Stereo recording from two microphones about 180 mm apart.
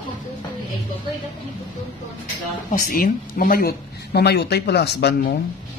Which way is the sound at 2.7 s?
50° left (ahead or behind).